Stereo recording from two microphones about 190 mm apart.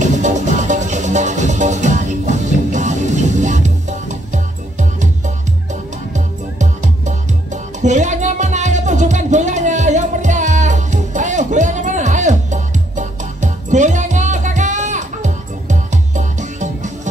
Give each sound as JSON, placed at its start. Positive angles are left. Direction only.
{"t": 0.0, "sound": "music", "side_deg": -40}
{"t": 6.1, "sound": "music", "side_deg": -40}